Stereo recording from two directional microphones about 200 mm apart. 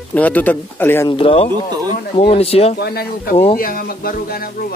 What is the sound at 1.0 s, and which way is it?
Speech, 25° left (ahead or behind).